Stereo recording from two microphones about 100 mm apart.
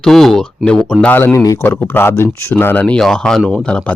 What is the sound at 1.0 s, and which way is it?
Speech, 20° left (ahead or behind).